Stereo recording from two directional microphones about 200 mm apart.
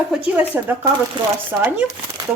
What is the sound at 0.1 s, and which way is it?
Speech, 10° right (ahead or behind).